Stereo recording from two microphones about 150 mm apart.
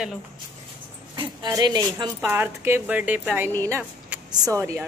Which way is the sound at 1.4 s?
30° right (ahead or behind).